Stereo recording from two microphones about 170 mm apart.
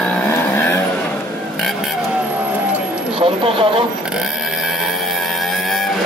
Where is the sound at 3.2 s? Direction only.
30° right (ahead or behind).